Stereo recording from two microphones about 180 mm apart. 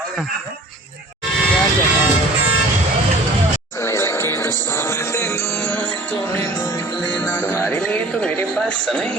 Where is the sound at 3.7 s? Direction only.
15° left (ahead or behind).